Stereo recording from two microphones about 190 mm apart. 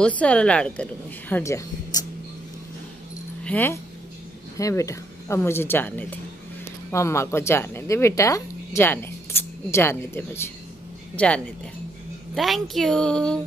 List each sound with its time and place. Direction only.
0.0 s a woman's voice: 5° left (ahead or behind)
3.4 s a woman's voice: 10° left (ahead or behind)